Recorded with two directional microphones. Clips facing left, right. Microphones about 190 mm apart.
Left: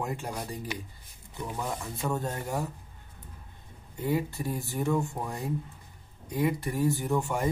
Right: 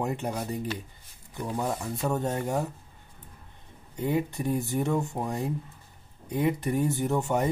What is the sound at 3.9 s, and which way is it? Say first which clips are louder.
Speech: right 2 dB; 20° right (ahead or behind).